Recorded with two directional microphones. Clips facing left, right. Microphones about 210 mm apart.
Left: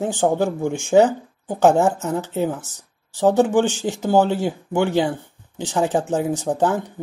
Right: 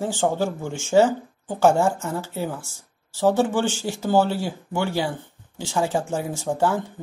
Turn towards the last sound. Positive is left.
turn(degrees=15)  # may be behind; listen again after turning